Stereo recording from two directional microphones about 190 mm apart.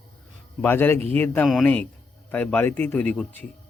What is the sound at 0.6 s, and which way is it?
A man's voice, 10° left (ahead or behind).